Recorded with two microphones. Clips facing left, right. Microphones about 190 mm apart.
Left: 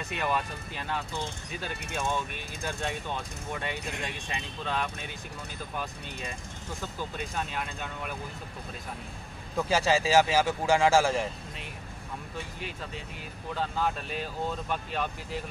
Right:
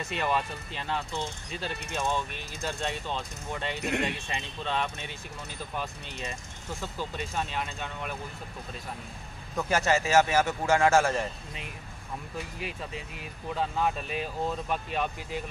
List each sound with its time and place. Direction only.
0.0 s speech: centre (ahead or behind)
3.2 s speech: 5° left (ahead or behind)
3.8 s speech: 65° right (ahead or behind)
4.3 s speech: centre (ahead or behind)
9.6 s speech: 10° left (ahead or behind)
12.5 s speech: 5° right (ahead or behind)